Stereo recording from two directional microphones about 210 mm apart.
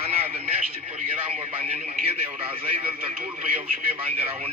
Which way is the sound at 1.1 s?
25° right (ahead or behind).